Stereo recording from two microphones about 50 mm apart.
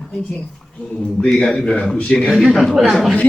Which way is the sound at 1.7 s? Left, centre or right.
Left.